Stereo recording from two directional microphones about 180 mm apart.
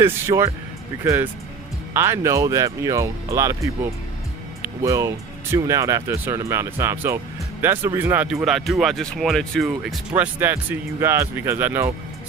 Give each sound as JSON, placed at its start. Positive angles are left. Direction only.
{"t": 0.0, "sound": "speech", "side_deg": -15}
{"t": 4.8, "sound": "speech", "side_deg": -15}
{"t": 10.2, "sound": "speech", "side_deg": -10}